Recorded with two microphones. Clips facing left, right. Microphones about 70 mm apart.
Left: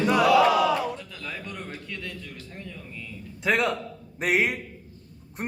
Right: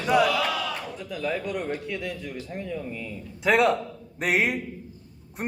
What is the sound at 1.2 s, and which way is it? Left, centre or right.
Speech, centre.